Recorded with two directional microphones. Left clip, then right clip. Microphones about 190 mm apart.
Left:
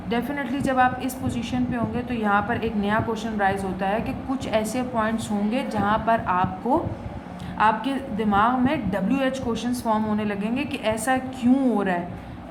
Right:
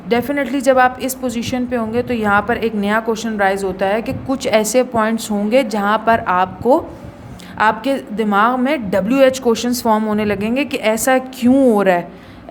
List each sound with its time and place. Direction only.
0.1 s a woman's voice: 50° right (ahead or behind)